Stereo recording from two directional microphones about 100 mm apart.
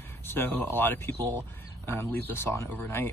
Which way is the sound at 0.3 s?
20° left (ahead or behind).